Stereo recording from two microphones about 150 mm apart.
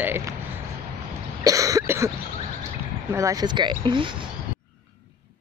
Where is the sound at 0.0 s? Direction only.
15° right (ahead or behind).